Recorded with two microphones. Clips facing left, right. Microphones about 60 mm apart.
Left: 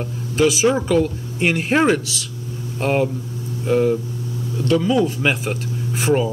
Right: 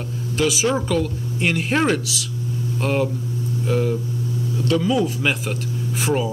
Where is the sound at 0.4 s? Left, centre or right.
Centre.